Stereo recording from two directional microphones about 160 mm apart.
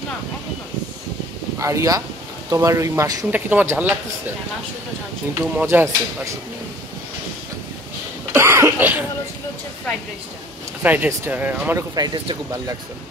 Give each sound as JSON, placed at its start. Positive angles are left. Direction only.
{"t": 1.6, "sound": "speech", "side_deg": -20}
{"t": 3.3, "sound": "speech", "side_deg": -10}
{"t": 5.4, "sound": "speech", "side_deg": -10}
{"t": 8.3, "sound": "speech", "side_deg": -15}
{"t": 10.8, "sound": "speech", "side_deg": -10}
{"t": 11.9, "sound": "speech", "side_deg": -25}